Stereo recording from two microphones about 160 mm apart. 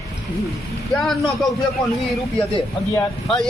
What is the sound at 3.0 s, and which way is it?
Speech, 5° left (ahead or behind).